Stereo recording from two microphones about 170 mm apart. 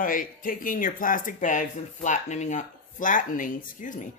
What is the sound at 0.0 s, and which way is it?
Speech, 55° left (ahead or behind).